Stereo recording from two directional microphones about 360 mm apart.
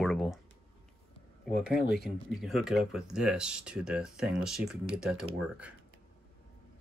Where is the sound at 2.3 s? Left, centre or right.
Centre.